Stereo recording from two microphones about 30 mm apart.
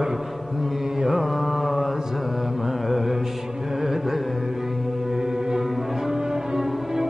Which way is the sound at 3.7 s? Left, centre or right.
Centre.